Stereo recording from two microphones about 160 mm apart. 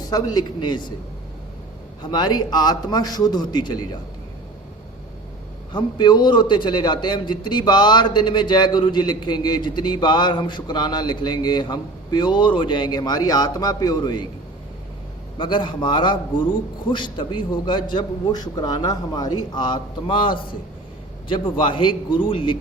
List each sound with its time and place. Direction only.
0.1 s a man's voice: 25° left (ahead or behind)
2.0 s a man's voice: 25° left (ahead or behind)
5.7 s a man's voice: 25° left (ahead or behind)
15.4 s a man's voice: 30° left (ahead or behind)